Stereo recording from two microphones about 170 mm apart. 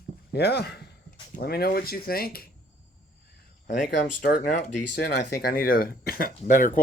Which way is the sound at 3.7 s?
50° left (ahead or behind).